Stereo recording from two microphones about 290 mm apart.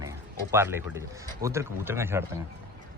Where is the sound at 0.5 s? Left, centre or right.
Centre.